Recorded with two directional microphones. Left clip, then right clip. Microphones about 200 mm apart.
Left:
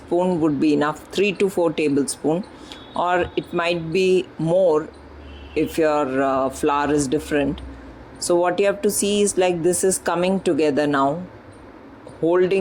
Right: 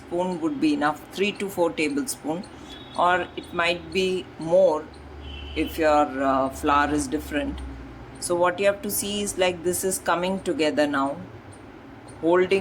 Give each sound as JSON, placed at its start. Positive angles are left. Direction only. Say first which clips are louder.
{"t": 0.2, "sound": "speech", "louder": "left 4 dB", "side_deg": 25}
{"t": 12.3, "sound": "speech", "louder": "left 2 dB", "side_deg": 30}